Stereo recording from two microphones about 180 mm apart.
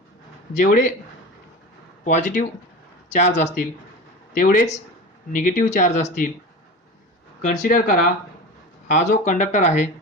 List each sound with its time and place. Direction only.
0.5 s speech: 45° left (ahead or behind)
2.0 s speech: 45° left (ahead or behind)
7.4 s speech: 45° left (ahead or behind)